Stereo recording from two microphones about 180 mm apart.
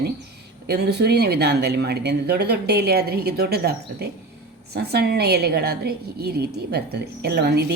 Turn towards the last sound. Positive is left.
turn(degrees=-65)  # may be behind; listen again after turning